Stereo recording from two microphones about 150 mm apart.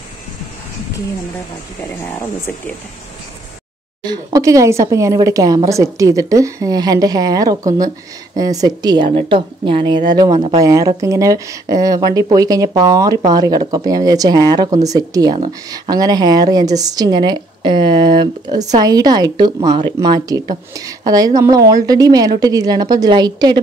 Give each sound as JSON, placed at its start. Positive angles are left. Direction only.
{"t": 4.0, "sound": "speech", "side_deg": -25}